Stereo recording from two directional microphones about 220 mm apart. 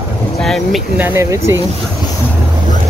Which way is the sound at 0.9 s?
10° right (ahead or behind).